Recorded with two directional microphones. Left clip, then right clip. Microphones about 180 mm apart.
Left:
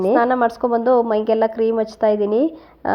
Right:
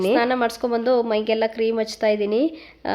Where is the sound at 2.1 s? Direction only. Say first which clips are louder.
Left 3 dB; 5° left (ahead or behind).